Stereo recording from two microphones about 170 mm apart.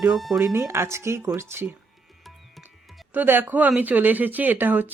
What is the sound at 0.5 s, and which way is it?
Speech, 15° right (ahead or behind).